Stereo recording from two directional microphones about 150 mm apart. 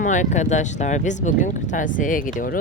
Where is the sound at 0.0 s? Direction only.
55° left (ahead or behind).